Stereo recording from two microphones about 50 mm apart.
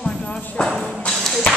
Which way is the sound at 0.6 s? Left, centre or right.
Left.